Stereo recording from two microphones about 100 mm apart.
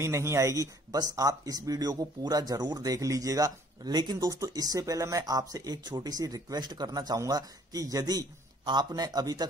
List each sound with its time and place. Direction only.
0.0 s speech: 30° right (ahead or behind)